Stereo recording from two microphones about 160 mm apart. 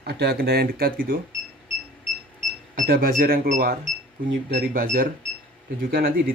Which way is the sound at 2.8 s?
65° right (ahead or behind).